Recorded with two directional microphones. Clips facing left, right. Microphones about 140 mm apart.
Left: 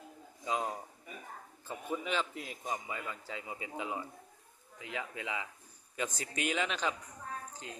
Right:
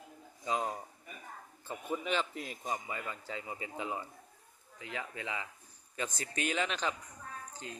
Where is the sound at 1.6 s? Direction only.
Centre (ahead or behind).